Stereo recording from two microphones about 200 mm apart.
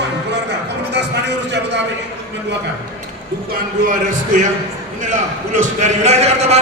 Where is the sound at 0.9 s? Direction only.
60° right (ahead or behind).